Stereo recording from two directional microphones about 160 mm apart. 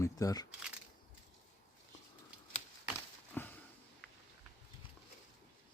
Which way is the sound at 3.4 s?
15° left (ahead or behind).